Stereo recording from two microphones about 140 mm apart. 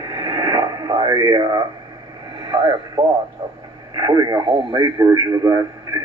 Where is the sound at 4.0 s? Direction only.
25° right (ahead or behind).